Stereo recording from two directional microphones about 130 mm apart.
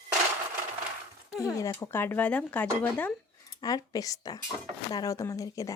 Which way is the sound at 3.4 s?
30° left (ahead or behind).